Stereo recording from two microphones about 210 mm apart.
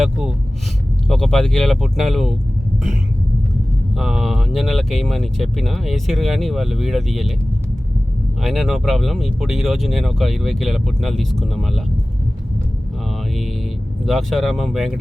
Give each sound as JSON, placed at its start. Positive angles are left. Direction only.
{"t": 0.0, "sound": "speech", "side_deg": -5}
{"t": 3.9, "sound": "speech", "side_deg": 0}
{"t": 8.4, "sound": "speech", "side_deg": 0}
{"t": 13.1, "sound": "mantra", "side_deg": 0}
{"t": 14.0, "sound": "speech", "side_deg": 0}